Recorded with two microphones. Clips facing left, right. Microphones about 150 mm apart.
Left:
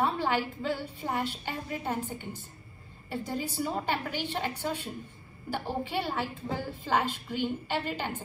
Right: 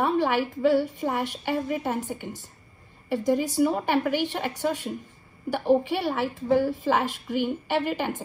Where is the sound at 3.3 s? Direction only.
55° right (ahead or behind).